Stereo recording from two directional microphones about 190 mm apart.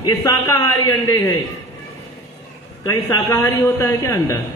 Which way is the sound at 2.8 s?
15° left (ahead or behind).